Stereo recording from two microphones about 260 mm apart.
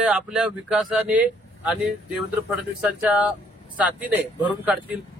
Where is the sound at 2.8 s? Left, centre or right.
Centre.